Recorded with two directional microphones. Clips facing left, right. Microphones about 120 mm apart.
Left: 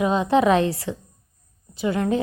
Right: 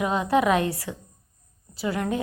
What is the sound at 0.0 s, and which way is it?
A woman's voice, 25° left (ahead or behind).